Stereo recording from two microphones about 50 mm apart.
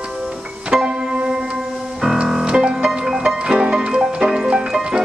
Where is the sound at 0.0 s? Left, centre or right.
Centre.